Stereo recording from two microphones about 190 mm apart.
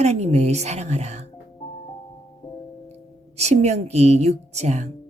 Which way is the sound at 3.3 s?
35° right (ahead or behind).